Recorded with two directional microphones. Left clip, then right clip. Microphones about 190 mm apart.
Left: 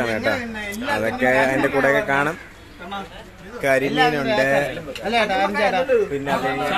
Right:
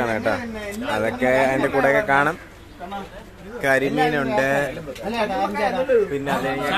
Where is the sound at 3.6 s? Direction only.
10° left (ahead or behind).